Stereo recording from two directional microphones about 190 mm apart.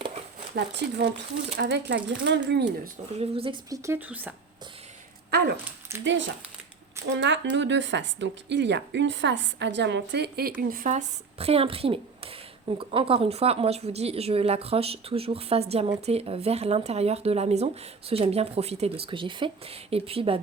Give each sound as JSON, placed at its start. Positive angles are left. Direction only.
{"t": 0.5, "sound": "speech", "side_deg": -65}
{"t": 3.2, "sound": "a woman's voice", "side_deg": -30}
{"t": 6.1, "sound": "a woman's voice", "side_deg": -75}